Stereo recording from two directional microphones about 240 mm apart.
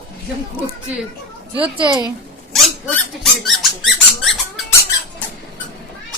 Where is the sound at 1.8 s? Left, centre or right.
Centre.